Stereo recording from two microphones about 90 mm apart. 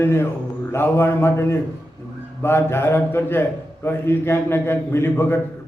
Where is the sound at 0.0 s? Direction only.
30° left (ahead or behind).